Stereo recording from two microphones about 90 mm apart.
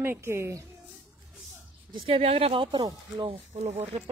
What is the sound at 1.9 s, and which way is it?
Speech, 90° right.